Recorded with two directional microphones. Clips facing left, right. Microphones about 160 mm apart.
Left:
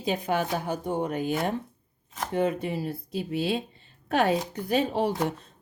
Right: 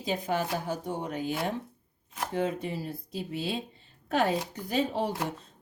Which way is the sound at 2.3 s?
65° left (ahead or behind).